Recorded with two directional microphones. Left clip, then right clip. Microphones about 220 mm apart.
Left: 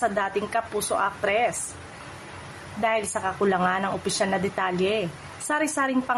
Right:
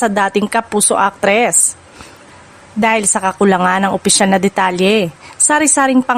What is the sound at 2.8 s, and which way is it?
A woman's voice, 45° right (ahead or behind).